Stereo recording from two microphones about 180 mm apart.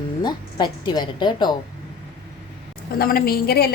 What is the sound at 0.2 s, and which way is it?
A woman's voice, 25° left (ahead or behind).